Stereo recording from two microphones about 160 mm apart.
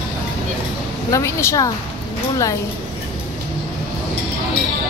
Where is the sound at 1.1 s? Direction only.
20° left (ahead or behind).